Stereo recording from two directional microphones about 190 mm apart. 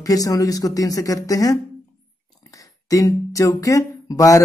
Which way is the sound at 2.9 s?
20° left (ahead or behind).